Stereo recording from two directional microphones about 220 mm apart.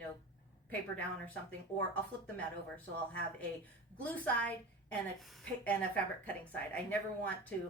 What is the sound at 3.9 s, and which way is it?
A woman's voice, 5° left (ahead or behind).